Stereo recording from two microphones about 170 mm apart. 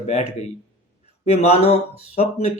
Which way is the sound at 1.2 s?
40° left (ahead or behind).